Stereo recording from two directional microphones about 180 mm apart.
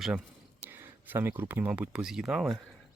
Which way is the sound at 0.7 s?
10° right (ahead or behind).